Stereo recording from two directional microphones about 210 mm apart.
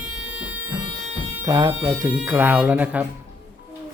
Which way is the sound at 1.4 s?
15° right (ahead or behind).